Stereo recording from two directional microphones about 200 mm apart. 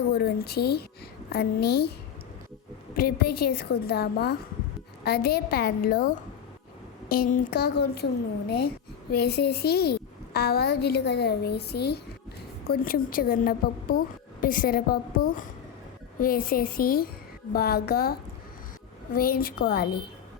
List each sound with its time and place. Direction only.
0.1 s a woman's voice: 50° left (ahead or behind)
2.9 s a woman's voice: 50° left (ahead or behind)